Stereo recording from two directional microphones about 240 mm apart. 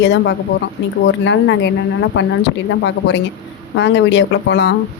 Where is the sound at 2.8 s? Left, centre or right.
Left.